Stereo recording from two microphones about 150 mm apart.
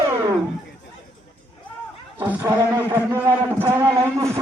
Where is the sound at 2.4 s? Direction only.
15° right (ahead or behind).